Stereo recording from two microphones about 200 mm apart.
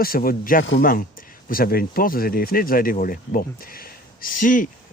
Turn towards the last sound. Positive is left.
turn(degrees=40)  # may be behind; listen again after turning